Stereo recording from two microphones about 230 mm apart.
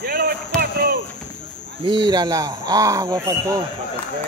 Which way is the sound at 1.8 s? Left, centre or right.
Centre.